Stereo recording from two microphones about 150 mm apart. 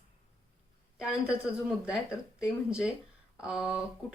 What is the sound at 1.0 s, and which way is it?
Speech, 5° right (ahead or behind).